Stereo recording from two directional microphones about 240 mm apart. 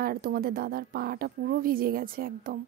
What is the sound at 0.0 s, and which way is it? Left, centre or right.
A woman's voice, right.